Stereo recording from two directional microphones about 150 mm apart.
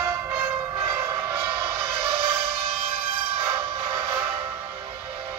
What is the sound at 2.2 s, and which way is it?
Music, 20° right (ahead or behind).